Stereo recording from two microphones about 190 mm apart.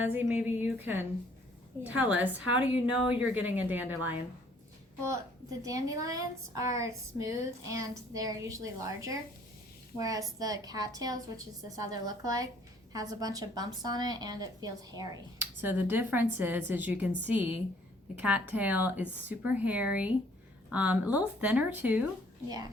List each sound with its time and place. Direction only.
0.0 s a woman's voice: 10° right (ahead or behind)
5.6 s a woman's voice: 20° right (ahead or behind)